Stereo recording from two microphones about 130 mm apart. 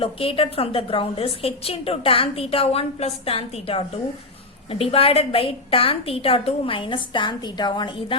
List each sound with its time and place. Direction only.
0.0 s a woman's voice: 45° left (ahead or behind)